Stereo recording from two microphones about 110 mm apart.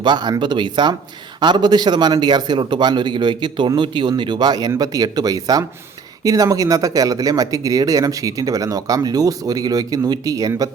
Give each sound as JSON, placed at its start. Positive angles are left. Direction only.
{"t": 0.0, "sound": "a man's voice", "side_deg": -45}